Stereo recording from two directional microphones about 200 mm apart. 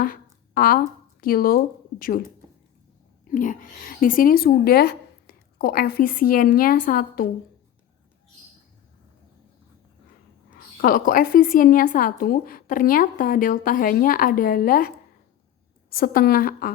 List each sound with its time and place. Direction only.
0.0 s a sound: 45° left (ahead or behind)
1.2 s speech: 45° left (ahead or behind)
3.2 s speech: 40° left (ahead or behind)
10.8 s speech: 45° left (ahead or behind)
16.0 s speech: 45° left (ahead or behind)